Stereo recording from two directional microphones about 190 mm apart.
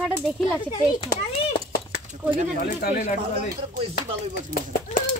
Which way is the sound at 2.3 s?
45° right (ahead or behind).